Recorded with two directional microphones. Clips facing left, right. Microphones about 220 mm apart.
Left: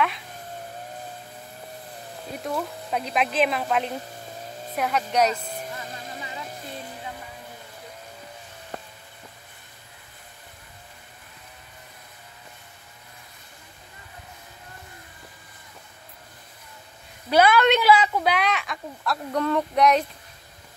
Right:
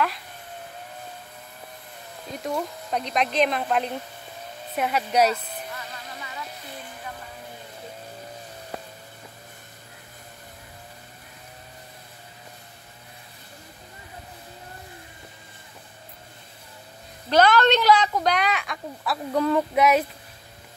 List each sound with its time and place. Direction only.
2.4 s a woman's voice: 5° left (ahead or behind)
5.8 s music: 25° left (ahead or behind)
8.7 s a sound: 5° right (ahead or behind)
17.3 s a woman's voice: 10° left (ahead or behind)